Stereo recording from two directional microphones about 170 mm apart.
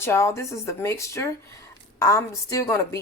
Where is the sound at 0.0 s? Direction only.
15° left (ahead or behind).